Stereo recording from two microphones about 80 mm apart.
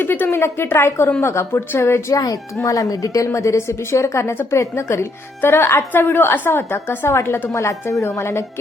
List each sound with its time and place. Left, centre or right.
0.0 s speech: left